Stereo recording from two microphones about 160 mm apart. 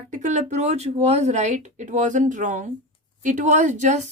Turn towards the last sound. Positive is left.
turn(degrees=-50)  # may be behind; listen again after turning